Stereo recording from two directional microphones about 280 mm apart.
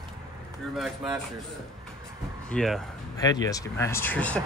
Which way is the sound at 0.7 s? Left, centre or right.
Centre.